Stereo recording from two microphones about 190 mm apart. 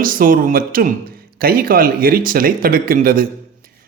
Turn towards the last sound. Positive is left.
turn(degrees=-50)  # may be behind; listen again after turning